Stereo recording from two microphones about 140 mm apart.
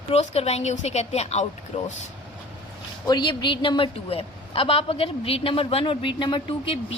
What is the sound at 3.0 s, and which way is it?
A woman's voice, 30° left (ahead or behind).